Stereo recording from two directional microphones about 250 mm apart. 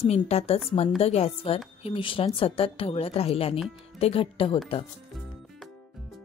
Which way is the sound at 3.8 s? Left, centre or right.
Left.